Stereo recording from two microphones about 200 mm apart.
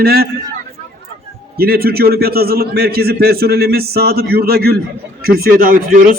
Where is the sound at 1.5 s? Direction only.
50° right (ahead or behind).